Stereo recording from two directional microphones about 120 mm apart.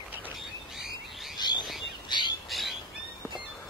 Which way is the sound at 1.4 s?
35° left (ahead or behind).